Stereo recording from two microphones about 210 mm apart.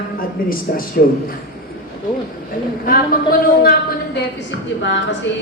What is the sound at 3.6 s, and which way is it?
A woman's voice, 45° left (ahead or behind).